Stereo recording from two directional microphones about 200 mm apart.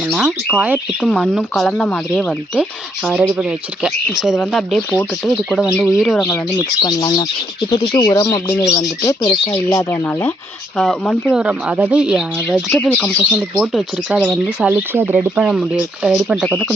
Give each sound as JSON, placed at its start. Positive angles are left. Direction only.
{"t": 0.0, "sound": "speech", "side_deg": -5}
{"t": 6.8, "sound": "speech", "side_deg": 20}